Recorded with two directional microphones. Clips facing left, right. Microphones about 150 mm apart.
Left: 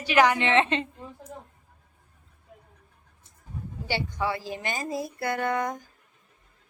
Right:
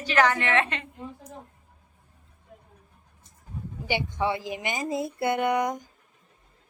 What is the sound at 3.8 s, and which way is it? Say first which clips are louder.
A woman's voice: right 2 dB; 20° right (ahead or behind).